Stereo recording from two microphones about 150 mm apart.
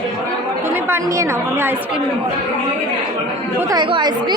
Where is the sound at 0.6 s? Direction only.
15° right (ahead or behind).